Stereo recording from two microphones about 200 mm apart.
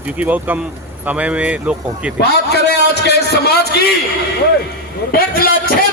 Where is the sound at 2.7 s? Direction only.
55° left (ahead or behind).